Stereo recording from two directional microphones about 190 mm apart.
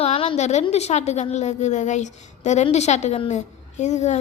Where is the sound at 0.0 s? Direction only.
30° left (ahead or behind).